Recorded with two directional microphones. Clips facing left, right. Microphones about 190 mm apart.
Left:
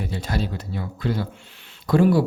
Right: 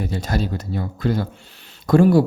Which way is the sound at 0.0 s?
45° right (ahead or behind).